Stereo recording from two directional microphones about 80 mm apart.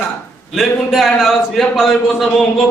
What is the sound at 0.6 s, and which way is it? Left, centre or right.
Speech, centre.